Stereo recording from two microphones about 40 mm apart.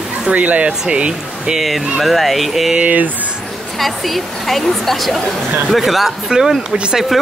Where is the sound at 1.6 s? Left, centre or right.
Centre.